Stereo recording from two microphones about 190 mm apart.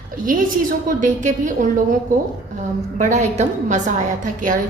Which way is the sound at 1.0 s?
40° right (ahead or behind).